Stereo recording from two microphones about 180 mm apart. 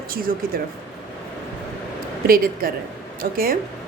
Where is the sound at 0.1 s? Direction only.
55° right (ahead or behind).